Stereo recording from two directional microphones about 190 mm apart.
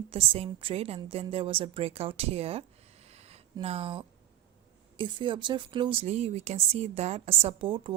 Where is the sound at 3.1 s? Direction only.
35° right (ahead or behind).